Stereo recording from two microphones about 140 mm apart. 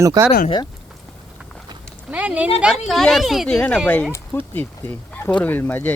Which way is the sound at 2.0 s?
10° right (ahead or behind).